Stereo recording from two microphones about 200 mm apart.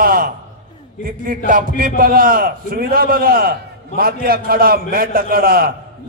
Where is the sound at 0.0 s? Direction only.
45° right (ahead or behind).